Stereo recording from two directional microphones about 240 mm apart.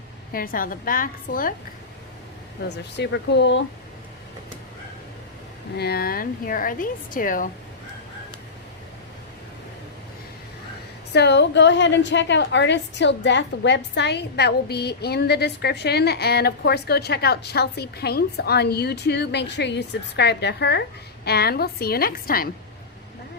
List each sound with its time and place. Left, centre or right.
0.3 s a woman's voice: left
2.6 s a woman's voice: left
5.7 s a woman's voice: left
11.1 s a woman's voice: left